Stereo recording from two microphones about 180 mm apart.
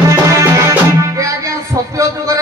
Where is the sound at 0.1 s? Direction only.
15° right (ahead or behind).